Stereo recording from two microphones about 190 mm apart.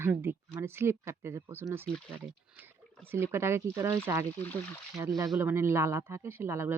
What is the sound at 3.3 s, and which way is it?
Speech, 15° right (ahead or behind).